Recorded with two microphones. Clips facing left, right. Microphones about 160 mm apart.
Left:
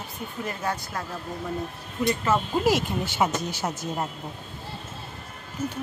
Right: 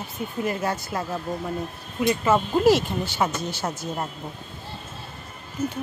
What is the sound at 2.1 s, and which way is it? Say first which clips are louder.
Speech: right 4 dB; centre (ahead or behind).